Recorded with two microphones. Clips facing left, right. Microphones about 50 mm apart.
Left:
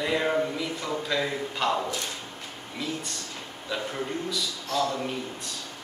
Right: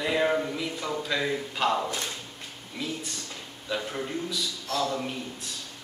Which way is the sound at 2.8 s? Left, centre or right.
Centre.